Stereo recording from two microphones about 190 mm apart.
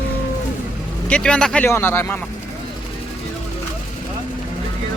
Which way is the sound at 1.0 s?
5° left (ahead or behind).